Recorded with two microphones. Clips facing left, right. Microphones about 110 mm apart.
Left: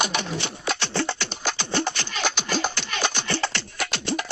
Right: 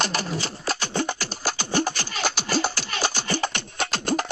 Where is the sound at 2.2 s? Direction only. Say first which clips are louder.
Right 1 dB; 5° right (ahead or behind).